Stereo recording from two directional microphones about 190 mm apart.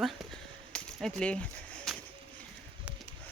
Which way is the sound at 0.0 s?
Centre (ahead or behind).